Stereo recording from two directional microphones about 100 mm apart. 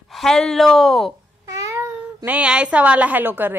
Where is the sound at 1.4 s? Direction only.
35° right (ahead or behind).